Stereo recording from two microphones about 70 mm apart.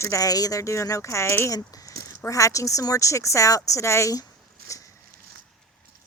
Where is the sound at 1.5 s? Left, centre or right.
Left.